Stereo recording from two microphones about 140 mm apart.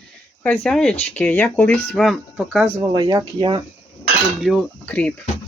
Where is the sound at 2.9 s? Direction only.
35° right (ahead or behind).